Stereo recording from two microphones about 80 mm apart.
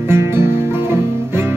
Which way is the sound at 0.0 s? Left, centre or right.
Right.